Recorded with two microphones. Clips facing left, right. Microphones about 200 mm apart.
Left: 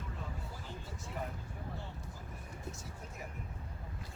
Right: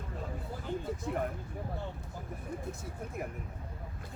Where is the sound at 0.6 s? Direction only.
55° right (ahead or behind).